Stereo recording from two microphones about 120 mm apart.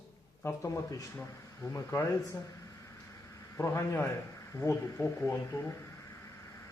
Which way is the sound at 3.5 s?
25° left (ahead or behind).